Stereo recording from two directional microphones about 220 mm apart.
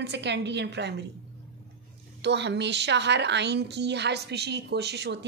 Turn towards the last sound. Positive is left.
turn(degrees=-50)  # may be behind; listen again after turning